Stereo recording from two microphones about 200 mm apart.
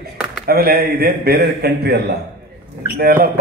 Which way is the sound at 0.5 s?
50° right (ahead or behind).